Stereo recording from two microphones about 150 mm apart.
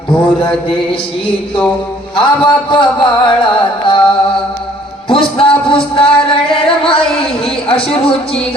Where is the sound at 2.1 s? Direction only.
35° left (ahead or behind).